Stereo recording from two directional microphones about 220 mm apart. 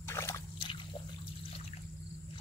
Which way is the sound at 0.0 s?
10° left (ahead or behind).